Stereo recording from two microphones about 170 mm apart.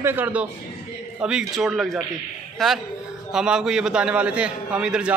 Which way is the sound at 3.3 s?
5° right (ahead or behind).